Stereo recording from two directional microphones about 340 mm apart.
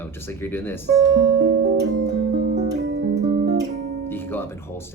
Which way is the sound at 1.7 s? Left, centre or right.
Centre.